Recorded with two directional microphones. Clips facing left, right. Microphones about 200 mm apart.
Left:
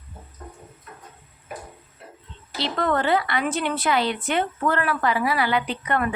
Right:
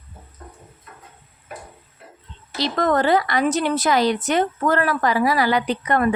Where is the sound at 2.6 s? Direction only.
40° right (ahead or behind).